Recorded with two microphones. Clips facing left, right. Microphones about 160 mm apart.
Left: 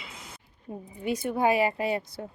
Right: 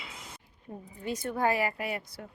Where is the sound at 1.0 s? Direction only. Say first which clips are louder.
Left 4 dB; 15° left (ahead or behind).